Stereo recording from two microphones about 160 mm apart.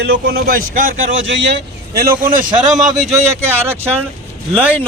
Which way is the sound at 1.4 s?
80° right.